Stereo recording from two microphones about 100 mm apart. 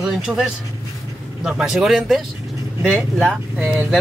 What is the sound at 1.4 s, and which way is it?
Speech, 5° right (ahead or behind).